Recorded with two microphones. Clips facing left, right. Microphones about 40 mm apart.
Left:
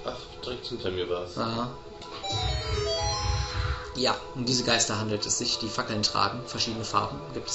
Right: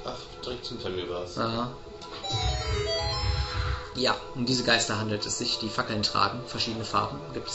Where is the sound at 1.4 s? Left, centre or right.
Centre.